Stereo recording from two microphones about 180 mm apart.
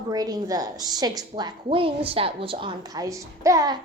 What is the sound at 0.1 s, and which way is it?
A woman's voice, 20° right (ahead or behind).